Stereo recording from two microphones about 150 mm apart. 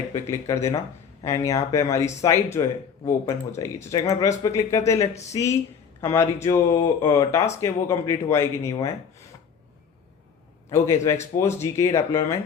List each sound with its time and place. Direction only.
0.1 s speech: 20° left (ahead or behind)
4.9 s speech: 45° left (ahead or behind)
5.3 s a man's voice: 20° left (ahead or behind)
10.7 s speech: 20° left (ahead or behind)